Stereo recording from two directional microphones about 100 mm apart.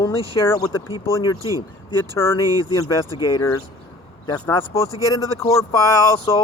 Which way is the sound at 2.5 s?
40° right (ahead or behind).